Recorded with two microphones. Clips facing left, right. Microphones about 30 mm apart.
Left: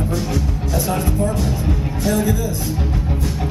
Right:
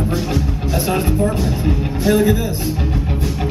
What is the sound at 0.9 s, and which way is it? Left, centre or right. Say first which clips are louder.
Speech: right 4 dB; right.